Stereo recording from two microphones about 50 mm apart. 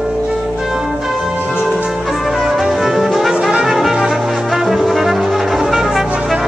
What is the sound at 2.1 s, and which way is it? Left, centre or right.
Music, centre.